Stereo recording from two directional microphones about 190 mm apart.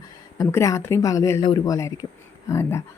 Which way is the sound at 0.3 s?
15° left (ahead or behind).